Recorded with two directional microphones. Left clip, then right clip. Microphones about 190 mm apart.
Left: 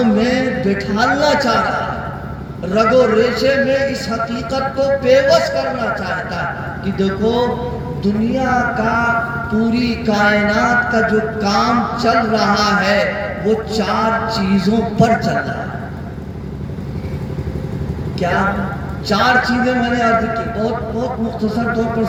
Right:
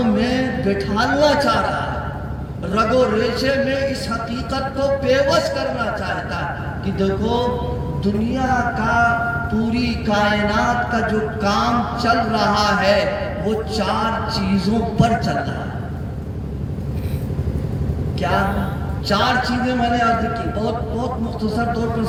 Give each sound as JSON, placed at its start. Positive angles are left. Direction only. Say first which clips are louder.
{"t": 0.0, "sound": "a man's voice", "louder": "left 4 dB", "side_deg": -45}
{"t": 19.0, "sound": "a man's voice", "louder": "left 4 dB", "side_deg": -45}